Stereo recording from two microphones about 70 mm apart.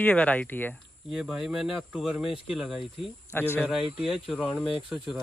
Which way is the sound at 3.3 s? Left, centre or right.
Left.